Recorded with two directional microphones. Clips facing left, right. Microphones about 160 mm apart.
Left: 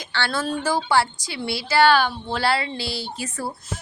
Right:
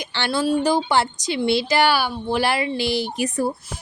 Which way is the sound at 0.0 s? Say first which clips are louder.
Right 3 dB; 15° right (ahead or behind).